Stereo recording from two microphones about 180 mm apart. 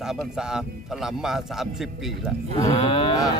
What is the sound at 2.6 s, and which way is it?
Moo, 25° left (ahead or behind).